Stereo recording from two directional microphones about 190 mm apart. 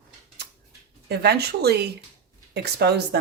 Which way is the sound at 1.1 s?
60° right (ahead or behind).